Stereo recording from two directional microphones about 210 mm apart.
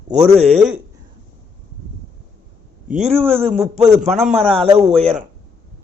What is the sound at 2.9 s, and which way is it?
Speech, 30° right (ahead or behind).